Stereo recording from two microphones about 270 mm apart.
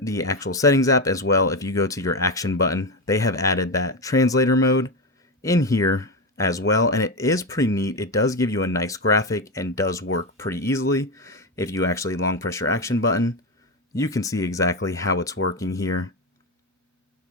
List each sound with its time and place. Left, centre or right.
0.0 s speech: centre
6.0 s a sound: centre
6.7 s speech: centre